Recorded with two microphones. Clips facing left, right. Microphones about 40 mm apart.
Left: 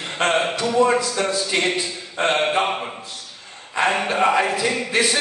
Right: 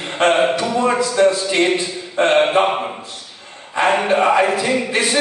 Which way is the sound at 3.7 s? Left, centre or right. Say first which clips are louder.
Right 4 dB; right.